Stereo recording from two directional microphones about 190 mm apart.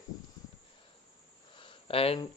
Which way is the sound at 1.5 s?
30° left (ahead or behind).